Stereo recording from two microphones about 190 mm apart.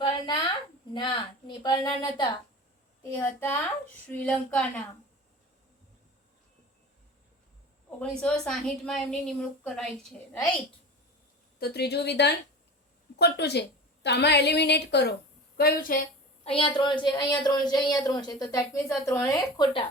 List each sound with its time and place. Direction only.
0.0 s a sound: 25° left (ahead or behind)
0.9 s a woman's voice: 25° left (ahead or behind)
3.0 s a child's voice: 10° left (ahead or behind)
7.9 s a woman's voice: 5° left (ahead or behind)
11.6 s a woman's voice: 55° left (ahead or behind)
16.4 s a woman's voice: 30° left (ahead or behind)